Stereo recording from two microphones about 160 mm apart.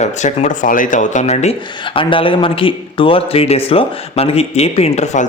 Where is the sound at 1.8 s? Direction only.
30° left (ahead or behind).